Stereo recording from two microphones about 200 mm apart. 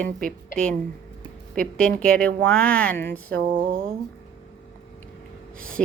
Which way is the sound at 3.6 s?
45° right (ahead or behind).